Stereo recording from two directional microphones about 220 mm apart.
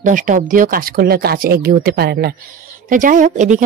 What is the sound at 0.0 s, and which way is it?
Speech, 35° right (ahead or behind).